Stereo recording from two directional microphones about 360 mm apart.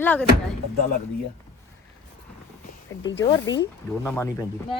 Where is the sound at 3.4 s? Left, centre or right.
Left.